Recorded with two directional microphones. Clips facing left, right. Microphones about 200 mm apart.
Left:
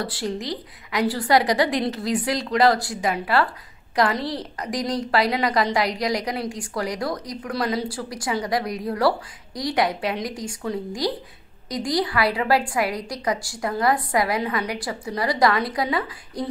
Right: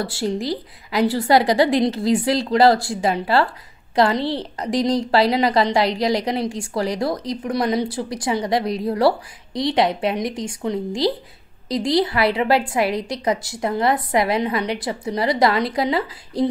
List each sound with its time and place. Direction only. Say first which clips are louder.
0.0 s a woman's voice: right 4 dB; 25° right (ahead or behind)